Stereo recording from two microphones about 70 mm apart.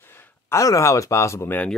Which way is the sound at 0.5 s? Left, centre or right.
Left.